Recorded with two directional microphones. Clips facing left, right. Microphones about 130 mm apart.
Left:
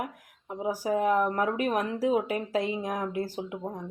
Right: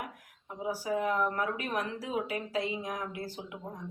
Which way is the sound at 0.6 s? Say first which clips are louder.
Left 5 dB; 45° left (ahead or behind).